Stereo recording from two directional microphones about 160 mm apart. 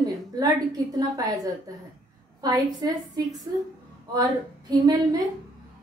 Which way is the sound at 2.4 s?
25° right (ahead or behind).